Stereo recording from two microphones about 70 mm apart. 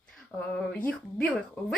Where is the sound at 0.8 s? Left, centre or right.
Left.